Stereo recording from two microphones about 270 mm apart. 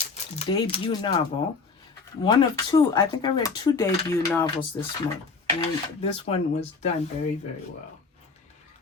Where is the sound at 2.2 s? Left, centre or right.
Centre.